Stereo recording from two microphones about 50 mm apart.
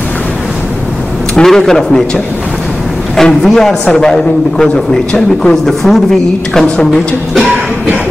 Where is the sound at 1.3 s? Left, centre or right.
Centre.